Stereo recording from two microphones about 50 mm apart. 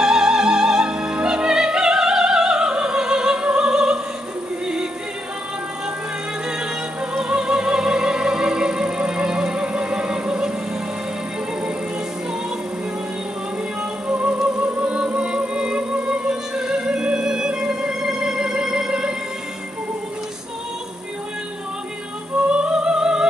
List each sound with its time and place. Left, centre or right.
0.0 s music: centre
7.2 s music: centre
14.0 s music: right
22.5 s music: centre